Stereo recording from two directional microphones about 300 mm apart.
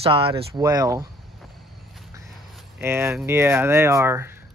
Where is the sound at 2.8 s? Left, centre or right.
Centre.